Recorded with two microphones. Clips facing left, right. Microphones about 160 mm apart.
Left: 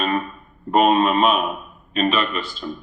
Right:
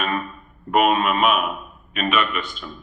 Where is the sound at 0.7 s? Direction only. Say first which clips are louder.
Left 2 dB; 30° left (ahead or behind).